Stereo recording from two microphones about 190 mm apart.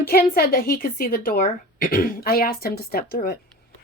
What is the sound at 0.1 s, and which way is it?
A woman's voice, 55° left (ahead or behind).